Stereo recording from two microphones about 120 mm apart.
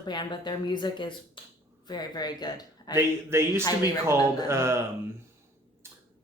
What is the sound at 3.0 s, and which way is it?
Speech, 20° right (ahead or behind).